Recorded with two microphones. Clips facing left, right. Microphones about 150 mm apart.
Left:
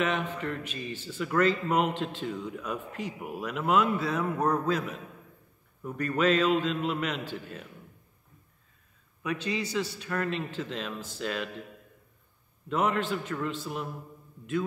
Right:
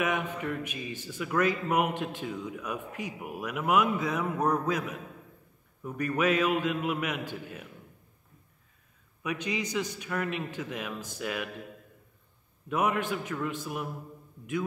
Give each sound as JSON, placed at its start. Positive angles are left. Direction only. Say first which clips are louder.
{"t": 0.0, "sound": "a man's voice", "louder": "left 1 dB", "side_deg": -15}
{"t": 9.2, "sound": "a man's voice", "louder": "left 1 dB", "side_deg": -15}
{"t": 12.6, "sound": "a man's voice", "louder": "left 1 dB", "side_deg": -10}